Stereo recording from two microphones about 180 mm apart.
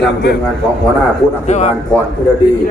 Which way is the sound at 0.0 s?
70° left (ahead or behind).